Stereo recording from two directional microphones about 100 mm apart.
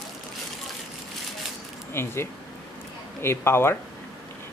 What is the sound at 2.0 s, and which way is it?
Speech, 25° left (ahead or behind).